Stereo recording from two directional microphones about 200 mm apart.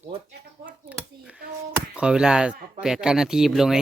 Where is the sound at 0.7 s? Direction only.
5° right (ahead or behind).